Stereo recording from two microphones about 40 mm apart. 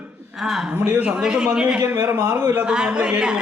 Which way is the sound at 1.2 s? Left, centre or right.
Right.